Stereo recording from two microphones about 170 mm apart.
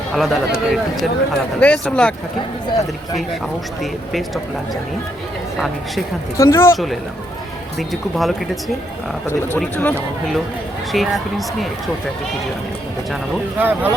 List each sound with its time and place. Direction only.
0.1 s speech: centre (ahead or behind)
6.3 s speech: 15° left (ahead or behind)
6.7 s speech: centre (ahead or behind)
9.6 s speech: 10° left (ahead or behind)
10.9 s speech: centre (ahead or behind)
13.6 s speech: 10° right (ahead or behind)